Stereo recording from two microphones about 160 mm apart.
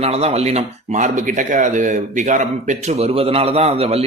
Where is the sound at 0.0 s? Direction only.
40° right (ahead or behind).